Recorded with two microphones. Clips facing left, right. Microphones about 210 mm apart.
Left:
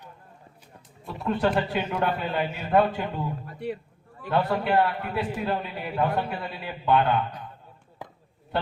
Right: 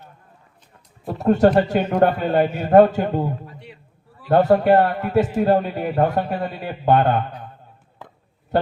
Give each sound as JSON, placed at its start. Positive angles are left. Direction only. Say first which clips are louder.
{"t": 1.2, "sound": "a man's voice", "louder": "right 9 dB", "side_deg": -45}